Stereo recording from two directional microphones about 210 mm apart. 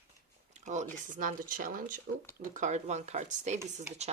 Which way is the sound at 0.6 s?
35° right (ahead or behind).